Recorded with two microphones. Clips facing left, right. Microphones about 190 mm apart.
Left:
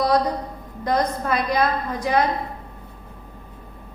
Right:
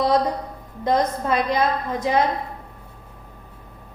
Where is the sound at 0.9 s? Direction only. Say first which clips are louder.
Right 1 dB; 25° right (ahead or behind).